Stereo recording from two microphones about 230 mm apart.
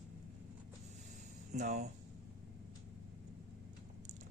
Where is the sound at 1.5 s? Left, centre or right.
Right.